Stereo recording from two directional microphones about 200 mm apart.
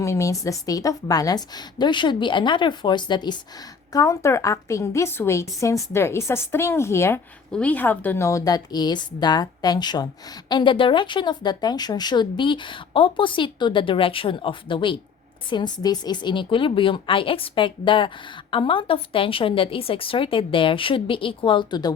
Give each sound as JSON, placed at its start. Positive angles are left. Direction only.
{"t": 0.0, "sound": "a woman's voice", "side_deg": 15}